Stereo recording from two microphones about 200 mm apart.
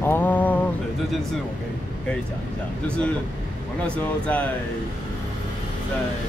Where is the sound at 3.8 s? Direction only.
5° left (ahead or behind).